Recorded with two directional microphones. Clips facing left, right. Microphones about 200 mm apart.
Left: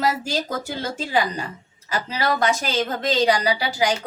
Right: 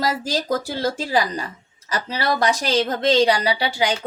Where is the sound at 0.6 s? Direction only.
35° right (ahead or behind).